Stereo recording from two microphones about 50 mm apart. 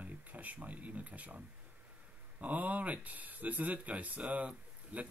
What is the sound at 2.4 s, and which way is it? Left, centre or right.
Speech, right.